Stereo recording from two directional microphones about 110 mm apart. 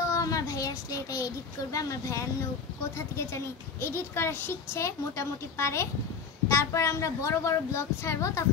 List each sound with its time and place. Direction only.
0.1 s a child's voice: 30° left (ahead or behind)